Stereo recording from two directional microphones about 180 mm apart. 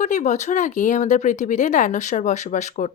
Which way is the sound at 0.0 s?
40° left (ahead or behind).